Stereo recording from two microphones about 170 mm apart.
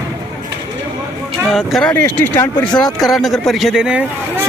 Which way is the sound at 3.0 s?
Centre (ahead or behind).